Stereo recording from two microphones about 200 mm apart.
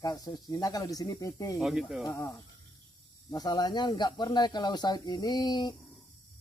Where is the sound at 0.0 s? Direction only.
20° left (ahead or behind).